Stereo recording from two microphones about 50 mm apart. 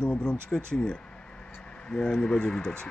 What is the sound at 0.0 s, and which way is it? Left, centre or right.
Speech, centre.